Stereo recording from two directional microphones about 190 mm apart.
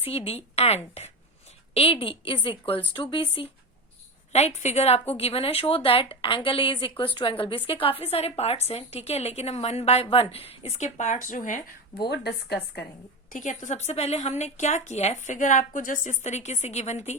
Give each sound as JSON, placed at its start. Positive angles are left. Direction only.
{"t": 0.0, "sound": "a woman's voice", "side_deg": 30}
{"t": 12.0, "sound": "a woman's voice", "side_deg": 60}
{"t": 13.3, "sound": "a woman's voice", "side_deg": 40}